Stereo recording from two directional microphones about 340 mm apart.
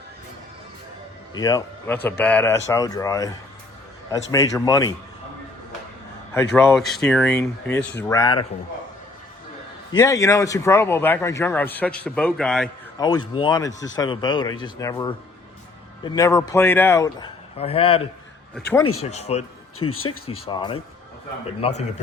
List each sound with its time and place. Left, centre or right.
1.3 s a man's voice: centre
6.3 s a man's voice: centre
9.9 s a man's voice: centre
19.9 s speech: left
20.2 s a man's voice: centre